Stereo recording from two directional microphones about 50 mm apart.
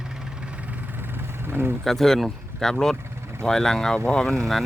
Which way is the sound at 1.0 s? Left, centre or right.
Right.